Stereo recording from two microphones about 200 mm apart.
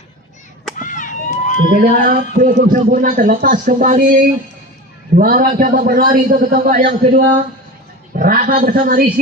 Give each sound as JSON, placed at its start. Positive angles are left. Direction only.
{"t": 0.8, "sound": "run", "side_deg": 40}
{"t": 1.8, "sound": "a man's voice", "side_deg": -50}